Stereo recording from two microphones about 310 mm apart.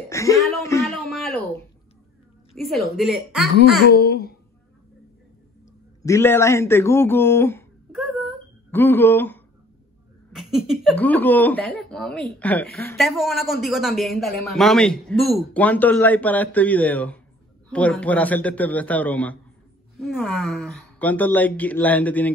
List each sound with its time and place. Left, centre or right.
0.1 s a sound: centre
2.5 s a woman's voice: centre
3.9 s a child's voice: left
6.0 s a man's voice: centre